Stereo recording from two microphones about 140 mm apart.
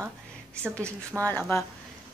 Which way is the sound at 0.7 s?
10° left (ahead or behind).